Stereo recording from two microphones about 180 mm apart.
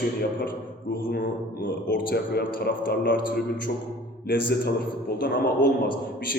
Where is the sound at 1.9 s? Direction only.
65° left (ahead or behind).